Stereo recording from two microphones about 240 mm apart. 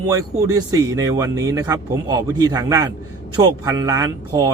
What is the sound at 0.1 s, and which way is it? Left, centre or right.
A man's voice, centre.